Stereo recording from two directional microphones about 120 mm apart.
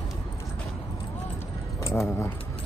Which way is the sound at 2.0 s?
20° left (ahead or behind).